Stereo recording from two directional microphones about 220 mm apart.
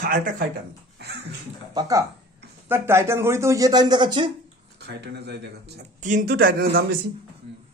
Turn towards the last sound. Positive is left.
turn(degrees=-45)  # may be behind; listen again after turning